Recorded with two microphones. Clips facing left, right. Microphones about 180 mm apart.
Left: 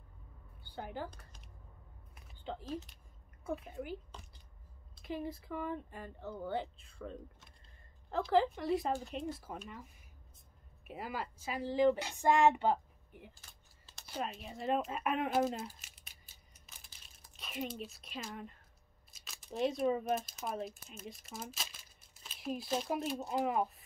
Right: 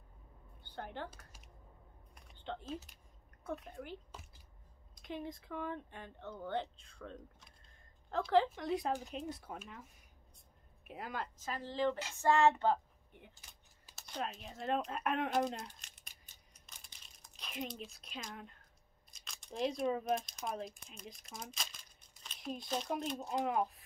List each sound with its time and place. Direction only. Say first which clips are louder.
0.6 s a woman's voice: left 2 dB; 5° left (ahead or behind)
2.1 s typing: left 1 dB; 5° left (ahead or behind)
3.4 s speech: left 3 dB; 5° left (ahead or behind)
4.1 s a sound: even; 5° right (ahead or behind)
5.0 s speech: left 3 dB; 5° left (ahead or behind)
10.9 s speech: left 2 dB; 5° left (ahead or behind)
13.3 s keys jangling: left 1 dB; 15° right (ahead or behind)
13.9 s a sound: left 1 dB; 5° left (ahead or behind)
19.1 s speech: left 3 dB; 5° left (ahead or behind)